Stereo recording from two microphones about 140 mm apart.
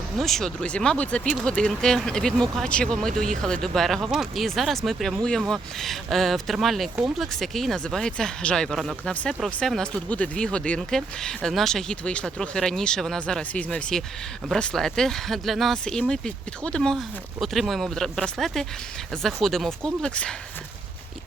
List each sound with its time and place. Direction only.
0.2 s speech: centre (ahead or behind)
3.1 s speech: 70° right (ahead or behind)
3.4 s speech: 5° left (ahead or behind)